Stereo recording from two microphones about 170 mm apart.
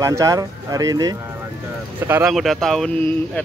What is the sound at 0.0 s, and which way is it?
Speech, 20° right (ahead or behind).